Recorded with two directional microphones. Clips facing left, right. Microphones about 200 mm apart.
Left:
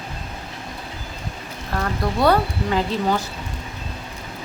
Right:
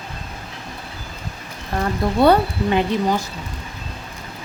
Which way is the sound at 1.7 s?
25° right (ahead or behind).